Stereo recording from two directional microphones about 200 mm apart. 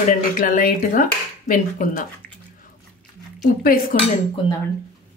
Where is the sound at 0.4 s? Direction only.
45° left (ahead or behind).